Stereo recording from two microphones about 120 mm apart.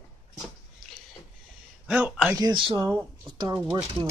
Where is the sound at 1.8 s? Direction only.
10° right (ahead or behind).